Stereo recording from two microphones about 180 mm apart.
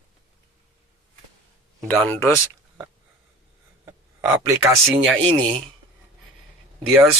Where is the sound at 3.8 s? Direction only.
15° right (ahead or behind).